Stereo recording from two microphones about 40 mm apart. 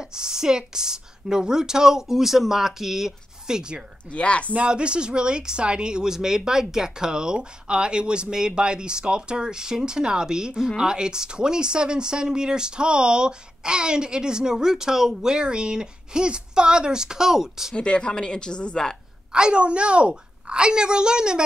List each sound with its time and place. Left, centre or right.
0.0 s a woman's voice: centre
4.1 s speech: left
4.6 s a woman's voice: right; by 17.7 s centre
17.7 s speech: left
19.3 s speech: right